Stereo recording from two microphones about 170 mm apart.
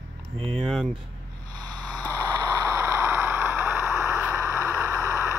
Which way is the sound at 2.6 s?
15° right (ahead or behind).